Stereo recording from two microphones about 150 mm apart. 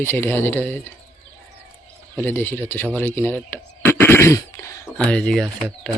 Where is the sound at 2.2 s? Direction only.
15° left (ahead or behind).